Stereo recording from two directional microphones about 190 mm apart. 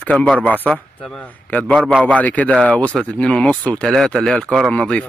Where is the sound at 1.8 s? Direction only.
5° right (ahead or behind).